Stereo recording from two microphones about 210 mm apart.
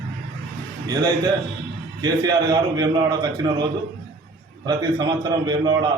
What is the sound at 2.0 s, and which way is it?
A man's voice, 20° right (ahead or behind).